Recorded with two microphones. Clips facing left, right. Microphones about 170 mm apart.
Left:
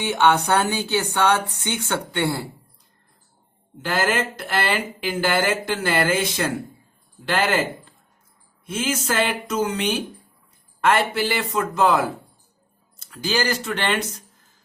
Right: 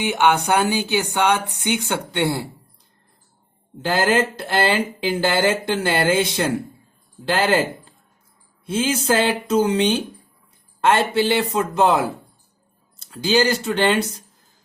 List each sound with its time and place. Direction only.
0.0 s speech: 10° right (ahead or behind)
3.8 s speech: 30° right (ahead or behind)
8.6 s speech: 30° right (ahead or behind)